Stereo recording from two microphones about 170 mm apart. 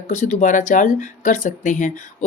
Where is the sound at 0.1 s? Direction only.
45° left (ahead or behind).